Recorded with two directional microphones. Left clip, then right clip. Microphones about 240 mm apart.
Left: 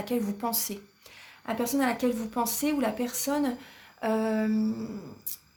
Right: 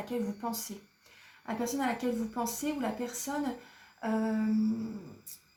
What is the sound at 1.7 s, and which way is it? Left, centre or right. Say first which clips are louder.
Speech: left 6 dB; left.